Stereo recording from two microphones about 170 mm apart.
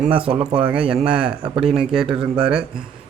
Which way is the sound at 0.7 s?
5° right (ahead or behind).